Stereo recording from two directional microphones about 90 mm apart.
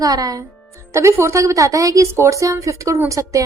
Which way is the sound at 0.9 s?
30° right (ahead or behind).